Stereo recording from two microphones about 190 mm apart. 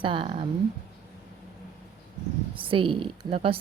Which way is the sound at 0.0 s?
25° right (ahead or behind).